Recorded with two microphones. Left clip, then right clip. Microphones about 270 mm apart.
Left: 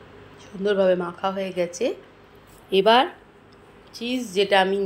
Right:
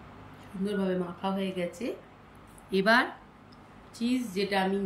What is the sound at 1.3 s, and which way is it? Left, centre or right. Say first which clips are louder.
Speech: left 8 dB; left.